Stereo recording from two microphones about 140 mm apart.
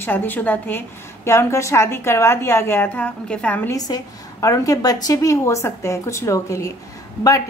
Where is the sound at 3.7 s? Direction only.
25° left (ahead or behind).